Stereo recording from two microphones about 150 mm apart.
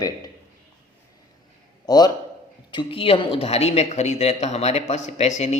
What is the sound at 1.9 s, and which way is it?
A man's voice, 25° left (ahead or behind).